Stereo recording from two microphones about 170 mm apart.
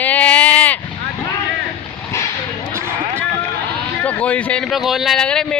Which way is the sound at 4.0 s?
10° left (ahead or behind).